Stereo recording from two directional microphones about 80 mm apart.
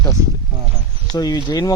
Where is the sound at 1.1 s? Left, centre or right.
Left.